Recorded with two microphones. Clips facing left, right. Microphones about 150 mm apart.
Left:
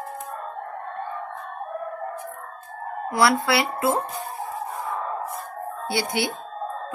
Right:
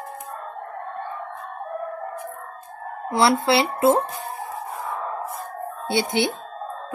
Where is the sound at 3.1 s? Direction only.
25° right (ahead or behind).